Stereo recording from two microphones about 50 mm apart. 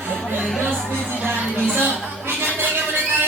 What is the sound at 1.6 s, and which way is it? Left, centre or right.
Speech, right.